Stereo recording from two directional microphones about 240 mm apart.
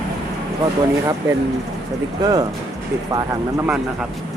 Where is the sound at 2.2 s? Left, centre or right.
Centre.